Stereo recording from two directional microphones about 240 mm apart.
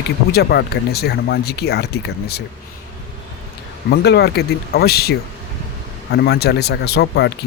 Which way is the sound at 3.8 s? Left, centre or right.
Left.